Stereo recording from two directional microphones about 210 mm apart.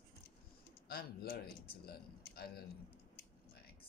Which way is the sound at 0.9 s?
45° left (ahead or behind).